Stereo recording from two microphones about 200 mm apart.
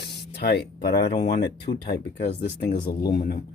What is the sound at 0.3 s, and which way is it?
Speech, 55° left (ahead or behind).